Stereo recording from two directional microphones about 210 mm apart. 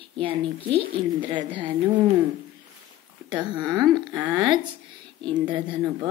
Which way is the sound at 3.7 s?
20° right (ahead or behind).